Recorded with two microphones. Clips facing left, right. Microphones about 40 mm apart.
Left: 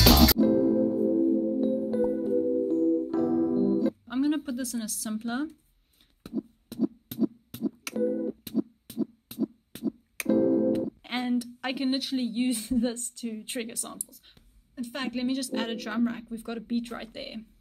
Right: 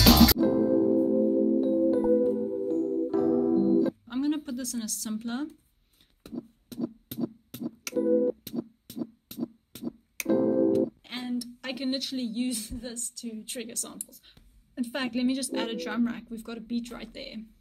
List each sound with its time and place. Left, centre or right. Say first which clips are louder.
0.0 s music: right 1 dB; centre
1.1 s music: right 1 dB; centre
8.1 s music: right 6 dB; centre
8.5 s a sound: left 5 dB; centre
9.8 s music: left 4 dB; centre
11.1 s a sound: left 5 dB; left
11.6 s a woman's voice: left 3 dB; centre
12.8 s speech: left 8 dB; left
13.6 s a woman's voice: left 3 dB; centre
14.8 s a woman's voice: right 3 dB; centre